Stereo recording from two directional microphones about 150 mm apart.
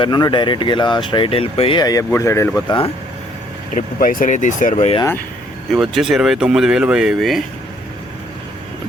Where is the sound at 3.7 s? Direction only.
65° left (ahead or behind).